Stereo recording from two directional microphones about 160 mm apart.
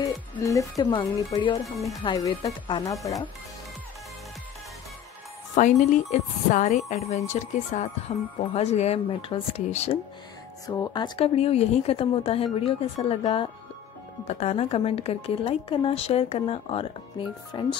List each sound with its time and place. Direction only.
0.0 s speech: 20° left (ahead or behind)
0.9 s speech: 35° left (ahead or behind)
2.0 s speech: 25° left (ahead or behind)
5.5 s a woman's voice: 45° left (ahead or behind)
10.7 s speech: 25° left (ahead or behind)